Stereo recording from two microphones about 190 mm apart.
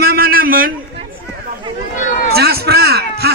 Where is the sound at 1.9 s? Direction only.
40° left (ahead or behind).